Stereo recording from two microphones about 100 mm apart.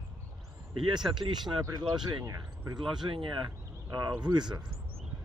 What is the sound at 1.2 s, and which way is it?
Speech, 45° right (ahead or behind).